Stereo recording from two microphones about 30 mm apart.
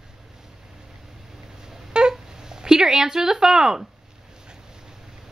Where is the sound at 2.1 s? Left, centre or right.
Right.